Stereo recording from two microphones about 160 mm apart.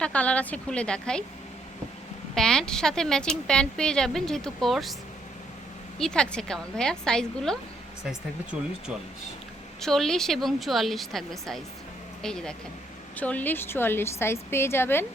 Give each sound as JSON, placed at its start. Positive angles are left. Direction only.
{"t": 0.0, "sound": "a woman's voice", "side_deg": 10}
{"t": 2.3, "sound": "a woman's voice", "side_deg": 5}
{"t": 6.0, "sound": "a woman's voice", "side_deg": 5}
{"t": 9.8, "sound": "a woman's voice", "side_deg": 5}